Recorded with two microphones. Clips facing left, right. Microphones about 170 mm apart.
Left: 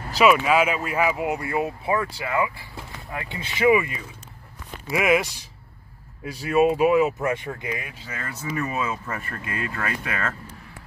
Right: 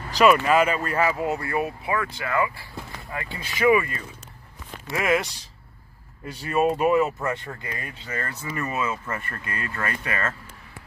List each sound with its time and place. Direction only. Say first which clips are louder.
0.2 s speech: even; 5° left (ahead or behind)
6.3 s speech: left 3 dB; 5° left (ahead or behind)